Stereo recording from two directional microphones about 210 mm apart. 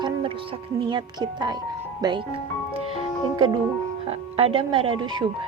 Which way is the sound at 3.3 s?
20° right (ahead or behind).